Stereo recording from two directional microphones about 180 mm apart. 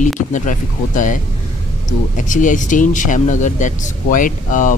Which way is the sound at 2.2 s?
45° left (ahead or behind).